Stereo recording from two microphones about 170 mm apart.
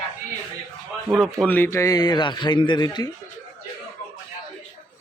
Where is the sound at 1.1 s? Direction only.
Centre (ahead or behind); by 3.1 s 25° left (ahead or behind).